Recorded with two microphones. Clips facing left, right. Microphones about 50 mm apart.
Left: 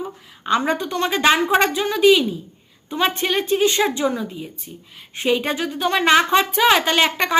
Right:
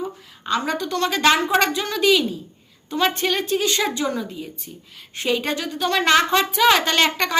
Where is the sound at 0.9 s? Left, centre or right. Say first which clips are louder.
Right 1 dB; centre.